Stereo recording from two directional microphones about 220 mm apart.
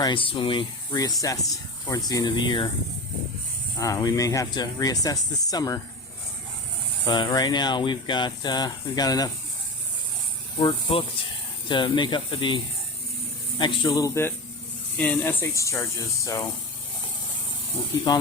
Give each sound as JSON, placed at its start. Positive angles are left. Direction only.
{"t": 0.0, "sound": "speech", "side_deg": 20}
{"t": 3.8, "sound": "speech", "side_deg": 15}
{"t": 7.1, "sound": "speech", "side_deg": 20}
{"t": 10.6, "sound": "speech", "side_deg": 20}